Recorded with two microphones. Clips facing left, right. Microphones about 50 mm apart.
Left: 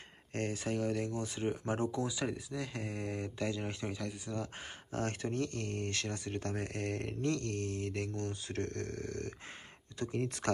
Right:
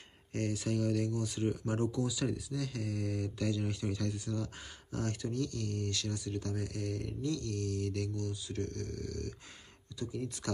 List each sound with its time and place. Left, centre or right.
0.3 s speech: left
4.3 s speech: centre
4.9 s speech: left
9.9 s speech: left